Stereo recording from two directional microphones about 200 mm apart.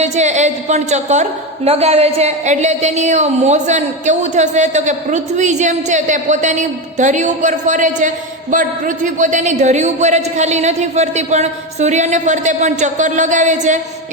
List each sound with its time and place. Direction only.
0.0 s a woman's voice: 35° right (ahead or behind)